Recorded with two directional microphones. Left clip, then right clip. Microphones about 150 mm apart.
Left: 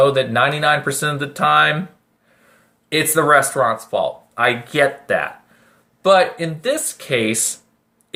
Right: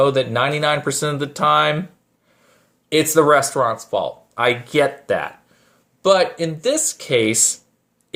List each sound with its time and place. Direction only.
0.0 s speech: 40° right (ahead or behind)
2.9 s speech: 40° right (ahead or behind)